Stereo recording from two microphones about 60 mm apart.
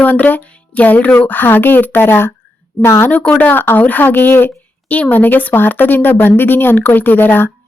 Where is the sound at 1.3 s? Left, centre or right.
Left.